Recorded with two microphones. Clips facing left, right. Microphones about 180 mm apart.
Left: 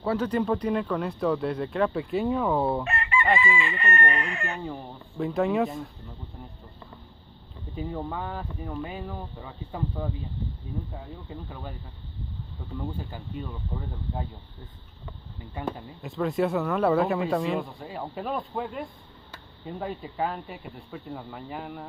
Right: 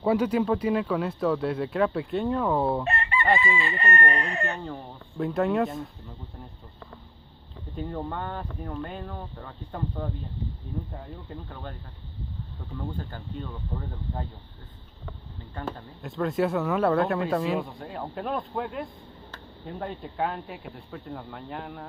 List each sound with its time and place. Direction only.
0.0 s speech: 10° right (ahead or behind)
2.8 s chicken: 35° right (ahead or behind)
4.6 s speech: centre (ahead or behind)
7.7 s speech: 5° left (ahead or behind)
11.2 s speech: 5° left (ahead or behind)
12.7 s speech: 10° left (ahead or behind)
15.5 s speech: 10° left (ahead or behind)